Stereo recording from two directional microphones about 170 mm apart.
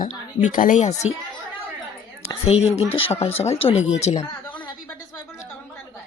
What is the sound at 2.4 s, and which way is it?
Speech, 40° left (ahead or behind).